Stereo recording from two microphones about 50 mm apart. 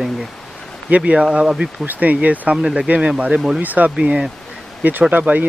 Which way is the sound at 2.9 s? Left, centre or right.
Right.